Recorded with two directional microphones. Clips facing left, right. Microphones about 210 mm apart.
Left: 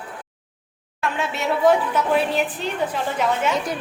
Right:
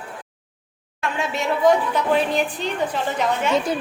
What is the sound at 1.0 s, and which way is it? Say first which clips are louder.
A woman's voice: even; centre (ahead or behind).